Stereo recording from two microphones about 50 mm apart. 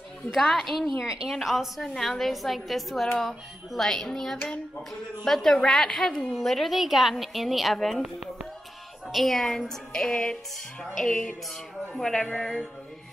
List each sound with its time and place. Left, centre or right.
0.3 s a woman's voice: centre
1.0 s a woman's voice: centre
1.3 s a woman's voice: centre
9.0 s speech: centre